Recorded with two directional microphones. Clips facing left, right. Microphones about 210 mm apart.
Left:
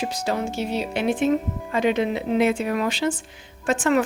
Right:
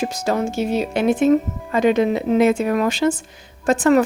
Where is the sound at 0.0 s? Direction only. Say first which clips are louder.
Right 4 dB; 45° right (ahead or behind).